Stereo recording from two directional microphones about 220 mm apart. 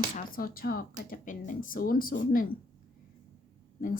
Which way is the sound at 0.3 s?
40° left (ahead or behind).